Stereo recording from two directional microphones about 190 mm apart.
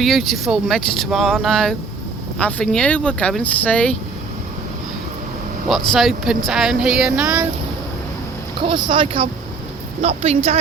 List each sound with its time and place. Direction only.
0.0 s speech: centre (ahead or behind)
5.6 s speech: centre (ahead or behind)
8.6 s speech: 25° right (ahead or behind)